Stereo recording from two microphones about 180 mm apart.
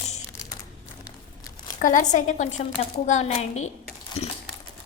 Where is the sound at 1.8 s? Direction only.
45° left (ahead or behind).